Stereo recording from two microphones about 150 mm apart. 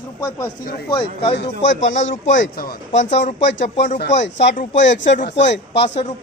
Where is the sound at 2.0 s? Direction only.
55° left (ahead or behind).